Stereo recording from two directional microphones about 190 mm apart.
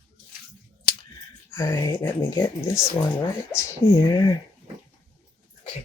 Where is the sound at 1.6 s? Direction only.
20° left (ahead or behind).